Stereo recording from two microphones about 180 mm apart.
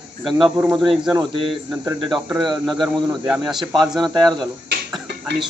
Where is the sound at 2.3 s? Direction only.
25° right (ahead or behind).